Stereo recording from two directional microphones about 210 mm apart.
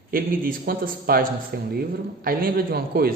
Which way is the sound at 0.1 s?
45° right (ahead or behind).